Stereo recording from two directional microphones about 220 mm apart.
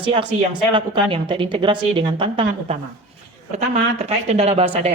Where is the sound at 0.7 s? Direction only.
20° right (ahead or behind).